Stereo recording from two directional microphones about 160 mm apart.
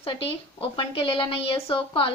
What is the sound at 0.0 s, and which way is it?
A woman's voice, 35° left (ahead or behind).